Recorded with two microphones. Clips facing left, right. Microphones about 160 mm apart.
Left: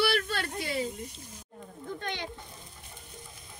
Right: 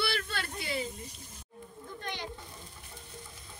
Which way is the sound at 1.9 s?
65° left (ahead or behind).